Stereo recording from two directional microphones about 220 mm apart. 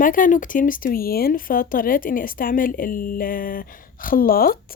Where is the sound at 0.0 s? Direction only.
40° left (ahead or behind).